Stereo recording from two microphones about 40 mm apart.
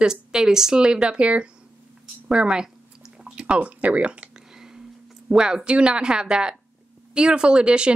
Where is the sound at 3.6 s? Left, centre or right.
Right.